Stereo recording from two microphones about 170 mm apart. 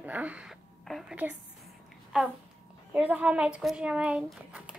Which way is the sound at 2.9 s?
10° right (ahead or behind).